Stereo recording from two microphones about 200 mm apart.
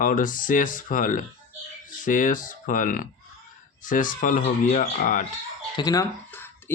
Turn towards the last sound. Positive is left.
turn(degrees=10)  # may be behind; listen again after turning